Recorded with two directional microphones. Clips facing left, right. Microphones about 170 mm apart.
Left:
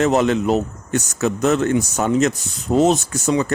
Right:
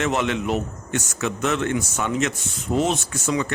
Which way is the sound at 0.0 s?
40° left (ahead or behind).